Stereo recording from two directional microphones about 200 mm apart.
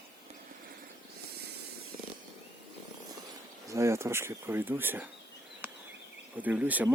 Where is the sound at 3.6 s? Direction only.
15° right (ahead or behind).